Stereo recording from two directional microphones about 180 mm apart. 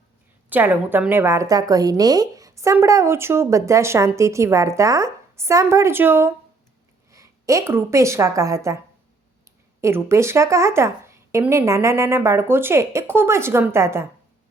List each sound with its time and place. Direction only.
0.5 s a woman's voice: 10° right (ahead or behind)
9.8 s a woman's voice: 15° right (ahead or behind)